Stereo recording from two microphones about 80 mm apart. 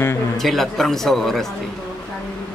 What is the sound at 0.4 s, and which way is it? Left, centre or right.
Speech, centre.